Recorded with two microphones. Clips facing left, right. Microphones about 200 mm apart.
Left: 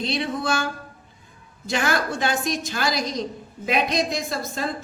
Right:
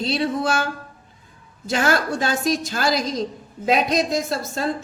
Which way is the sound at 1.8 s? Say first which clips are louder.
Right 3 dB; 40° right (ahead or behind).